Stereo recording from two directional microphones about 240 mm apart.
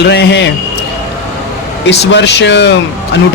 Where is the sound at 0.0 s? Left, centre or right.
Left.